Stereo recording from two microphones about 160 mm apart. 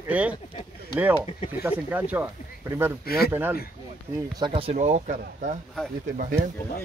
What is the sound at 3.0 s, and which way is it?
Speech, 75° left (ahead or behind).